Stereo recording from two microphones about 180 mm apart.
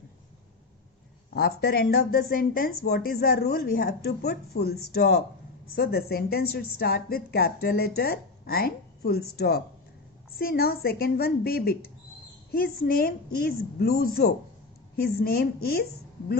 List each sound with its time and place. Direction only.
1.3 s speech: 55° left (ahead or behind)